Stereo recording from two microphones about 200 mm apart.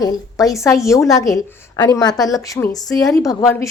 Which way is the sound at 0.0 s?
20° left (ahead or behind).